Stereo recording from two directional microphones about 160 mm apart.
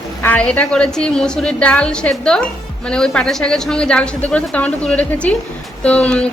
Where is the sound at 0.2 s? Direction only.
10° left (ahead or behind).